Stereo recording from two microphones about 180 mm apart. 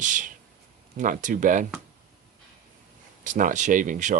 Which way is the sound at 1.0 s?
45° right (ahead or behind).